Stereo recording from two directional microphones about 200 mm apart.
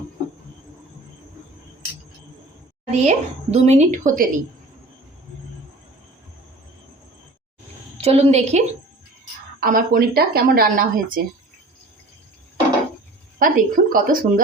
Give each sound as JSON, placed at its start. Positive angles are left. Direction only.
{"t": 2.9, "sound": "a woman's voice", "side_deg": -35}
{"t": 8.0, "sound": "a woman's voice", "side_deg": -30}
{"t": 9.6, "sound": "speech", "side_deg": -45}
{"t": 13.4, "sound": "speech", "side_deg": -45}